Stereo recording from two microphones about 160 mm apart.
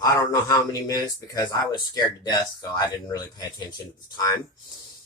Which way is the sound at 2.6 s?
25° left (ahead or behind).